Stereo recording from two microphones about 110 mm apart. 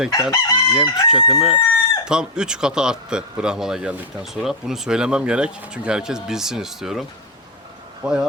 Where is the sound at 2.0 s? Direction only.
5° right (ahead or behind).